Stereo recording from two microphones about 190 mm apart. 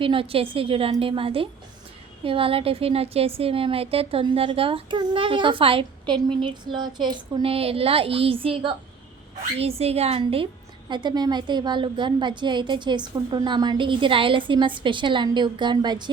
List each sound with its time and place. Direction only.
0.0 s a woman's voice: 30° right (ahead or behind)